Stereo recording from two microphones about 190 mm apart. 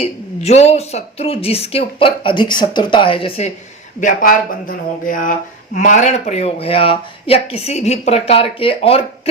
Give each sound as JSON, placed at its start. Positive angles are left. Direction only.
{"t": 0.0, "sound": "speech", "side_deg": 35}
{"t": 4.0, "sound": "speech", "side_deg": 45}